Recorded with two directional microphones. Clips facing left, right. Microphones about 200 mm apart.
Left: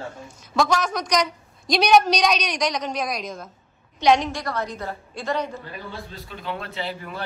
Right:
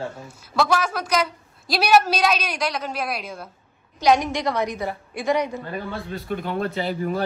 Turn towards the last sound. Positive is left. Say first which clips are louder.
# right 7 dB
turn(degrees=-45)  # may be behind; listen again after turning